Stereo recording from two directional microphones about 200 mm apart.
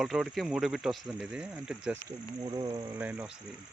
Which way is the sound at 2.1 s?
20° right (ahead or behind).